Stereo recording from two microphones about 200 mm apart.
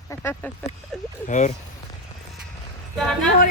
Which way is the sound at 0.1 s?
10° left (ahead or behind).